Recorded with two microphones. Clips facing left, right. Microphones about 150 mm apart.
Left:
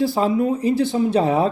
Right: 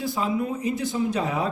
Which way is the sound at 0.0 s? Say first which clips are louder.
Left 7 dB; 30° left (ahead or behind).